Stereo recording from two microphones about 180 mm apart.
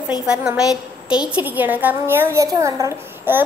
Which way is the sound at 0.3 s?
5° right (ahead or behind).